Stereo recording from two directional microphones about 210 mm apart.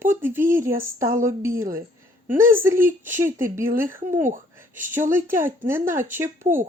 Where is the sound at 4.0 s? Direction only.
40° right (ahead or behind).